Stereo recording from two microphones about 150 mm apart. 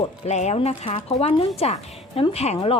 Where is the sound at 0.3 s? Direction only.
50° left (ahead or behind).